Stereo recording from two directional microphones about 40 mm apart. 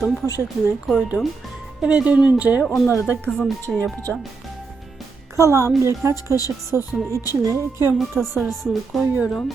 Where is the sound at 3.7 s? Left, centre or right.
Centre.